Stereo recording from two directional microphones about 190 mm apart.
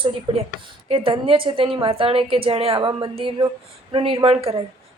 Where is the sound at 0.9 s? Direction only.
30° right (ahead or behind).